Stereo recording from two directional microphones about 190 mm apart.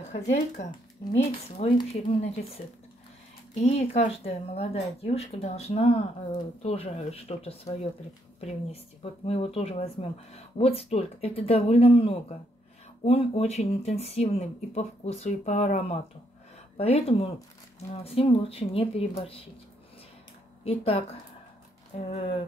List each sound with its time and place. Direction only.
0.1 s speech: 40° left (ahead or behind)
9.0 s speech: 30° left (ahead or behind)
20.6 s speech: 30° left (ahead or behind)